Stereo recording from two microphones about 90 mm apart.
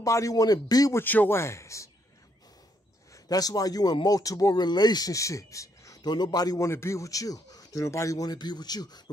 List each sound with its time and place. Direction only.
0.0 s speech: 40° left (ahead or behind)
0.9 s speech: 20° left (ahead or behind)
3.1 s speech: 45° left (ahead or behind)
6.0 s speech: 50° left (ahead or behind)
6.7 s speech: 30° left (ahead or behind); by 9.1 s 50° left (ahead or behind)